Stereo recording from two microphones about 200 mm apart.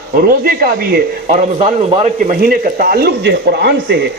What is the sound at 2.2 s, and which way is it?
A man's voice, 45° right (ahead or behind).